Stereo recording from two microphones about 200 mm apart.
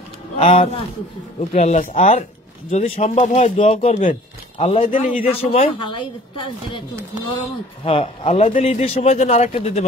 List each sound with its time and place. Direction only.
0.4 s a man's voice: 30° left (ahead or behind)
5.2 s speech: 30° left (ahead or behind)
7.8 s a man's voice: 30° left (ahead or behind)